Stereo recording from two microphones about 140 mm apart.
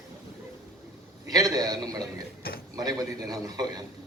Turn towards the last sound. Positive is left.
turn(degrees=-30)  # may be behind; listen again after turning